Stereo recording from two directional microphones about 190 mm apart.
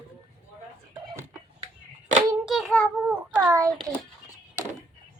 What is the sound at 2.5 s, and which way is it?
Child singing, centre (ahead or behind).